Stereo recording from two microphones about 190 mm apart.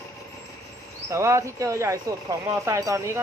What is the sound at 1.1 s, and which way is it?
Speech, 15° right (ahead or behind).